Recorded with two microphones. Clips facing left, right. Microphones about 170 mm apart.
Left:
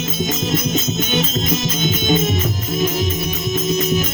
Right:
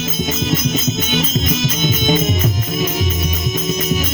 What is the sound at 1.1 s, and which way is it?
Music, 50° left (ahead or behind).